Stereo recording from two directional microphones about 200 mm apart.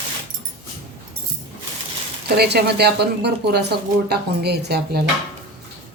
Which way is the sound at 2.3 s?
55° right (ahead or behind).